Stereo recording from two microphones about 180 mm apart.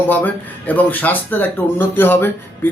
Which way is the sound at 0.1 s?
10° left (ahead or behind).